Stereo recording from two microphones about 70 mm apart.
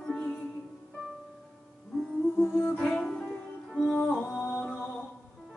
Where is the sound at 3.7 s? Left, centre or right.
Centre.